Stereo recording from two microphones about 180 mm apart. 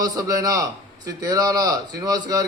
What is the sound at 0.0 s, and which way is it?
A man's voice, 20° right (ahead or behind).